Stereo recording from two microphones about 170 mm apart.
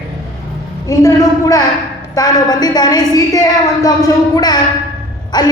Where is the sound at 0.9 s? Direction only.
20° left (ahead or behind).